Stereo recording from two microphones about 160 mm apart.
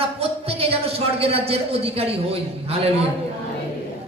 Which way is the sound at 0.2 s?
40° right (ahead or behind).